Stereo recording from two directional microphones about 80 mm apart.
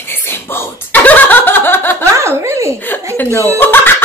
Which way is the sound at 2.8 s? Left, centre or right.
Left.